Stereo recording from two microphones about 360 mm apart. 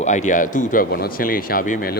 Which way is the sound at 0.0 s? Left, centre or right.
Centre.